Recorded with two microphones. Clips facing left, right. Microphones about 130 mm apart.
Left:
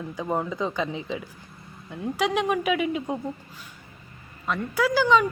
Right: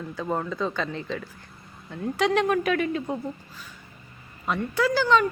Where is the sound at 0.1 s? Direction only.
15° left (ahead or behind).